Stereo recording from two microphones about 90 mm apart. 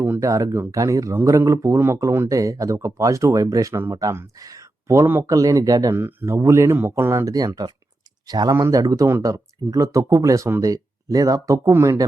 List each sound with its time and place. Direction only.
0.2 s a man's voice: 35° right (ahead or behind)
5.2 s a man's voice: 40° right (ahead or behind)
6.0 s speech: 20° right (ahead or behind)
6.2 s speech: 30° right (ahead or behind)
7.3 s speech: 40° right (ahead or behind)
8.5 s a man's voice: 30° right (ahead or behind)
8.8 s a man's voice: 45° right (ahead or behind)